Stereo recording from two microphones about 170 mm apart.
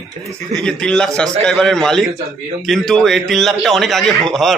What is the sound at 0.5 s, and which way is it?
A man's voice, 5° left (ahead or behind).